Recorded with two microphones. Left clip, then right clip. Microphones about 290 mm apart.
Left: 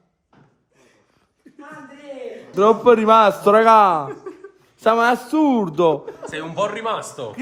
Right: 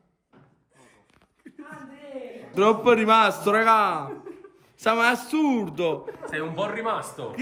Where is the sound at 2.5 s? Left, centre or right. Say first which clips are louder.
Left 5 dB; centre.